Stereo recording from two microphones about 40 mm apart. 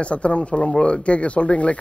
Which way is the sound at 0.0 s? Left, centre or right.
Left.